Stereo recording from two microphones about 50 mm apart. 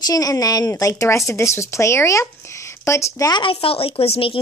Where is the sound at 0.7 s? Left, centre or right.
Left.